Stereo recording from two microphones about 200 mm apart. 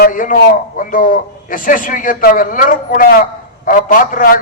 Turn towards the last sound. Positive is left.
turn(degrees=45)  # may be behind; listen again after turning